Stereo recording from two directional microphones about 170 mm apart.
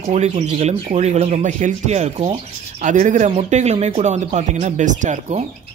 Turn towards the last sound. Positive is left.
turn(degrees=-45)  # may be behind; listen again after turning